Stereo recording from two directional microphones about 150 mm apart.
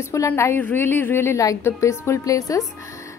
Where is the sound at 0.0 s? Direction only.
20° left (ahead or behind).